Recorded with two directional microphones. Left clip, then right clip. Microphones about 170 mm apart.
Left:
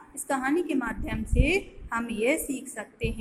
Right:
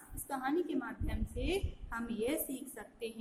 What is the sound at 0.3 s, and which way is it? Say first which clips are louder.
A woman's voice: left 9 dB; 15° left (ahead or behind).